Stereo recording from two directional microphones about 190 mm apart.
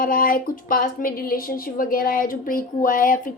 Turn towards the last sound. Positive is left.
turn(degrees=45)  # may be behind; listen again after turning